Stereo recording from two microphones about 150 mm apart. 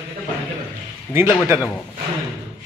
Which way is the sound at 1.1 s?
15° right (ahead or behind).